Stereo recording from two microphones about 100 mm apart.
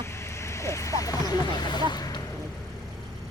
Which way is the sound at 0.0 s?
25° left (ahead or behind).